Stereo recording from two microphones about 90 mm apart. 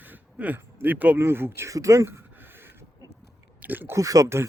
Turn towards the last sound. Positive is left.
turn(degrees=-35)  # may be behind; listen again after turning